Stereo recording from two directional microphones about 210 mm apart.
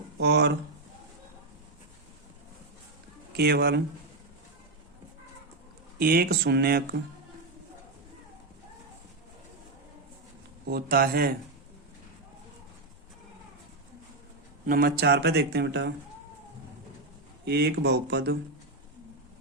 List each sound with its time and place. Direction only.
0.2 s speech: 50° right (ahead or behind)
3.3 s speech: 50° right (ahead or behind)
6.0 s speech: 45° right (ahead or behind)
10.7 s speech: 45° right (ahead or behind)
14.7 s speech: 45° right (ahead or behind)
17.4 s speech: 50° right (ahead or behind)